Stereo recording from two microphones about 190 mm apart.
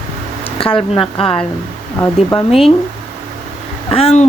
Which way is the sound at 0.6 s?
30° left (ahead or behind).